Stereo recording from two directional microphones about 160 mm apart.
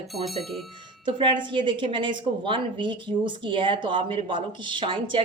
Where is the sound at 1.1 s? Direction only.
30° right (ahead or behind).